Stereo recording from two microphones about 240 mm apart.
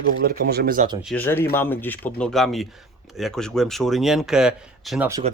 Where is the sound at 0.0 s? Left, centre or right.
Right.